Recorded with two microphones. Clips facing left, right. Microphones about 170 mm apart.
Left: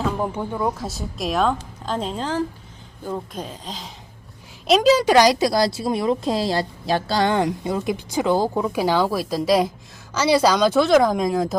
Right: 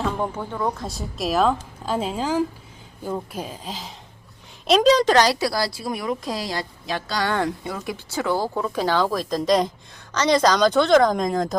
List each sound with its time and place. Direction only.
0.0 s a woman's voice: 5° left (ahead or behind)